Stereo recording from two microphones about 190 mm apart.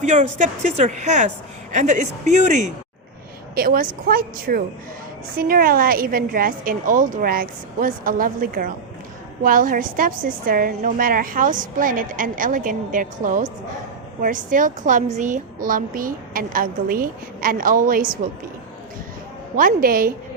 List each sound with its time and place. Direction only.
0.0 s speech: 40° right (ahead or behind)
3.5 s a woman's voice: 50° right (ahead or behind)
19.5 s a woman's voice: 50° right (ahead or behind)